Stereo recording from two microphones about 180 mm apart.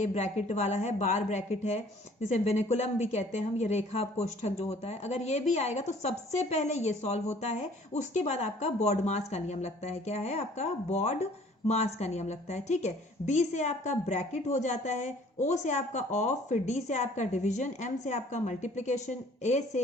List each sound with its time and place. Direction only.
0.1 s speech: 40° left (ahead or behind)